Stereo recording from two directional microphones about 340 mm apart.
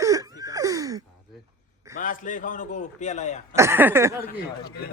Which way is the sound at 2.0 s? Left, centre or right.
Left.